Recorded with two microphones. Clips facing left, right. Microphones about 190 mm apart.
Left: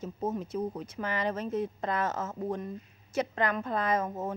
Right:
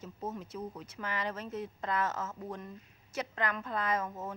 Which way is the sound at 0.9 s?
20° left (ahead or behind).